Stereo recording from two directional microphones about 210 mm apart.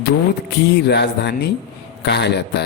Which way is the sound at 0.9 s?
50° left (ahead or behind).